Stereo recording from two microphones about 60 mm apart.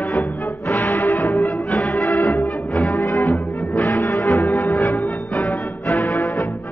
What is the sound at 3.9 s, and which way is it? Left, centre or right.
Music, left.